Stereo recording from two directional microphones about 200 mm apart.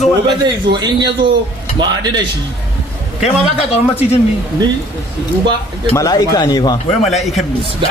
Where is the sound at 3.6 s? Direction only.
30° left (ahead or behind).